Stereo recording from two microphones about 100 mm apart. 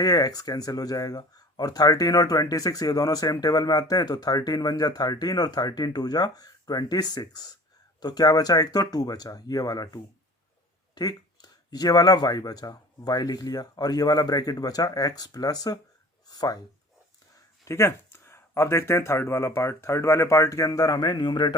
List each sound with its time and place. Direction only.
0.0 s speech: 40° left (ahead or behind)
17.7 s speech: 30° left (ahead or behind); by 21.5 s 45° left (ahead or behind)